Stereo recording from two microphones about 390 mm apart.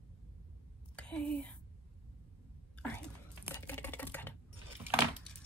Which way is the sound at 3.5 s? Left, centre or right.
Centre.